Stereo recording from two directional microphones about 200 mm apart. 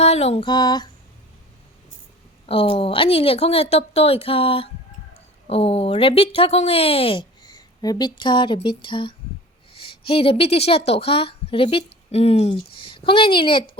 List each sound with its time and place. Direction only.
0.0 s speech: 30° left (ahead or behind)
2.5 s speech: 25° left (ahead or behind)